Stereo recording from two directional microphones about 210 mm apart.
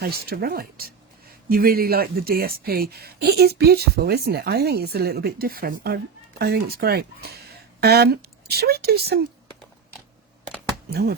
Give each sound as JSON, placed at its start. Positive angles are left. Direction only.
{"t": 0.0, "sound": "speech", "side_deg": -45}
{"t": 10.8, "sound": "speech", "side_deg": -50}